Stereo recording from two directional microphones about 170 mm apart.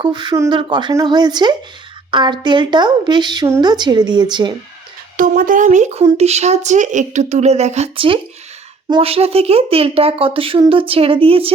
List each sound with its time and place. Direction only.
0.0 s speech: 25° right (ahead or behind)
5.1 s speech: 55° right (ahead or behind); by 11.5 s 35° right (ahead or behind)